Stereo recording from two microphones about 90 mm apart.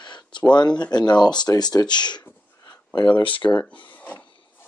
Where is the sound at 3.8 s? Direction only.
15° left (ahead or behind).